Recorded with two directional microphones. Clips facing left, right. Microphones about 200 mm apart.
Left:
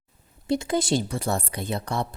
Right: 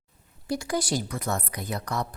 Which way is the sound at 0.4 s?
25° left (ahead or behind).